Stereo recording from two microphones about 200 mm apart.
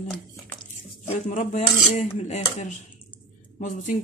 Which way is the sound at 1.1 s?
40° left (ahead or behind).